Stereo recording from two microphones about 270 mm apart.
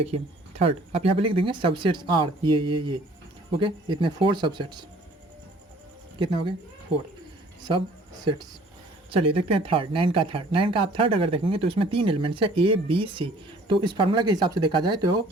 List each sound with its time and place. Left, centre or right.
0.0 s speech: right
6.1 s speech: centre
9.0 s speech: right